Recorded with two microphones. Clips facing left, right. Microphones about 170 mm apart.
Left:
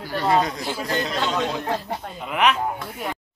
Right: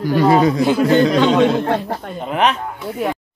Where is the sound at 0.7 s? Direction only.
60° right (ahead or behind).